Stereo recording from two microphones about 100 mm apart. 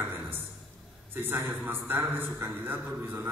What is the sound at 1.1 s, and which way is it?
A man's voice, 25° right (ahead or behind).